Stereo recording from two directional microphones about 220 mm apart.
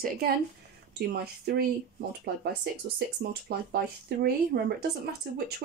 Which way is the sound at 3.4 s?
45° right (ahead or behind).